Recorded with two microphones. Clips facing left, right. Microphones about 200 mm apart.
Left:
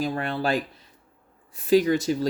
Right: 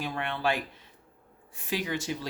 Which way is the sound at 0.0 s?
40° left (ahead or behind).